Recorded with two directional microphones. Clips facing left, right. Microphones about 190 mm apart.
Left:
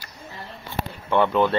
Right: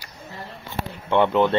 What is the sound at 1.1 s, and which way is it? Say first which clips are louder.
Speech: right 1 dB; 20° right (ahead or behind).